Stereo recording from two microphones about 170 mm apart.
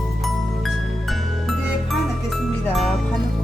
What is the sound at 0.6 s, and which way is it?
Music, centre (ahead or behind).